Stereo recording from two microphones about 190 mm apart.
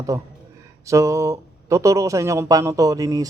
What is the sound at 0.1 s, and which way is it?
A man's voice, 15° right (ahead or behind).